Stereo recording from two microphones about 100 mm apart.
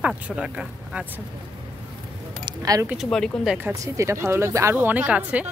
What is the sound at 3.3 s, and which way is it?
Speech, 5° left (ahead or behind).